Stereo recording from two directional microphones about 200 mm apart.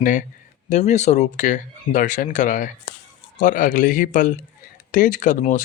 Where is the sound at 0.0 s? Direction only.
40° left (ahead or behind).